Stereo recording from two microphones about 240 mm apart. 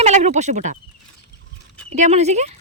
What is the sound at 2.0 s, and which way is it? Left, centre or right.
Speech, right.